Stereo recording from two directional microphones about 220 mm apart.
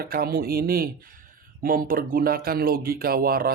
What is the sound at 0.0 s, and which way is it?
Speech, 45° right (ahead or behind).